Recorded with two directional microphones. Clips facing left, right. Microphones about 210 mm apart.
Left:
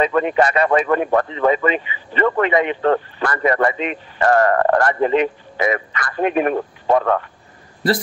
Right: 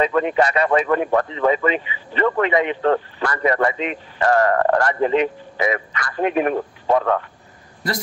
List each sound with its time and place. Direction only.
0.0 s speech: 55° left (ahead or behind)